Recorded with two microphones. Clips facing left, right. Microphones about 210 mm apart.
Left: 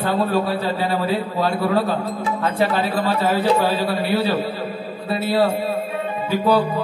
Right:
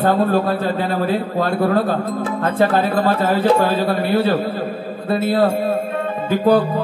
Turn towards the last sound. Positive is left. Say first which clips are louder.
# right 3 dB
turn(degrees=-50)  # may be behind; listen again after turning